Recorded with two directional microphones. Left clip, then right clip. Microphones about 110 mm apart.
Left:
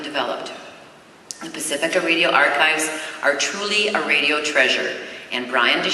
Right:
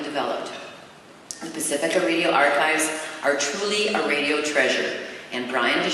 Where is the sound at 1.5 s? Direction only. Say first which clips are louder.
Left 2 dB; 15° left (ahead or behind).